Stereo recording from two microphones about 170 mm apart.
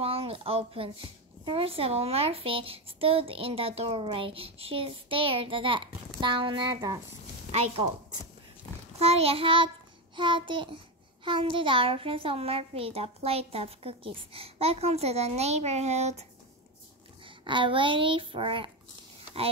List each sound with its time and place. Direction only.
0.0 s a child's voice: 35° right (ahead or behind)
9.0 s a child's voice: 35° right (ahead or behind)
17.2 s speech: 30° right (ahead or behind)